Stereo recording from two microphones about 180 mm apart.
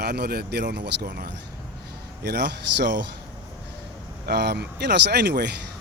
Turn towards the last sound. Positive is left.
turn(degrees=-70)  # may be behind; listen again after turning